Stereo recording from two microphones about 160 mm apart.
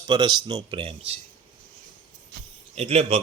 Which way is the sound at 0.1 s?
25° right (ahead or behind).